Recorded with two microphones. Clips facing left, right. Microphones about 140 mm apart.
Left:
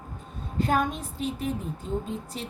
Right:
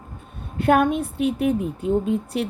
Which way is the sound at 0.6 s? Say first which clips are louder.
Right 8 dB; 65° right (ahead or behind).